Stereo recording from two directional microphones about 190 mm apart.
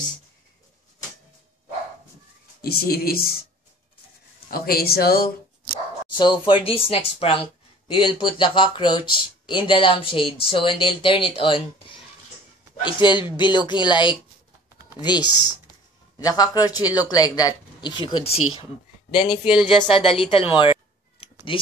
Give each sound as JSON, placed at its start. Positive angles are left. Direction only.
{"t": 2.6, "sound": "speech", "side_deg": 55}
{"t": 4.5, "sound": "speech", "side_deg": 50}
{"t": 6.1, "sound": "speech", "side_deg": 25}